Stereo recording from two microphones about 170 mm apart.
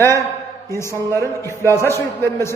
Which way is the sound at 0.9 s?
20° right (ahead or behind).